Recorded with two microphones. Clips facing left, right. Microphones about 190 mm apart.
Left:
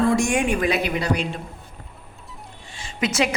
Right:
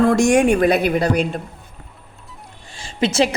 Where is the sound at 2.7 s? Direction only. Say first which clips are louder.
Right 5 dB; 30° right (ahead or behind).